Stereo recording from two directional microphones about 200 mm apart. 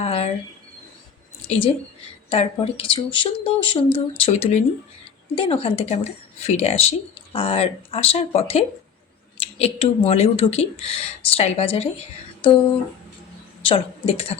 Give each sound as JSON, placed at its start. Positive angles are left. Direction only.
{"t": 0.0, "sound": "a sound", "side_deg": 30}
{"t": 1.5, "sound": "speech", "side_deg": 30}
{"t": 13.7, "sound": "a woman's voice", "side_deg": 25}